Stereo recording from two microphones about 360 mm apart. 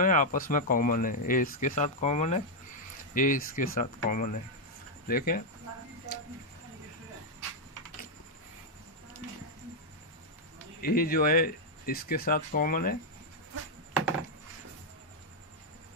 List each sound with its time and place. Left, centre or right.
0.0 s speech: left
10.8 s speech: left